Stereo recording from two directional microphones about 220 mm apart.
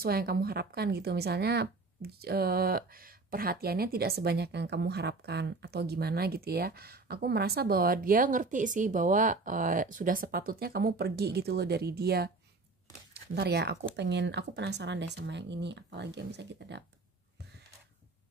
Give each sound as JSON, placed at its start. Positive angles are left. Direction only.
{"t": 0.0, "sound": "speech", "side_deg": -45}